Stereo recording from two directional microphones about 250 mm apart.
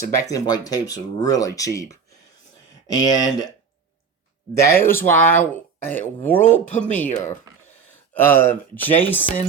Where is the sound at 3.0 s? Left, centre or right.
Centre.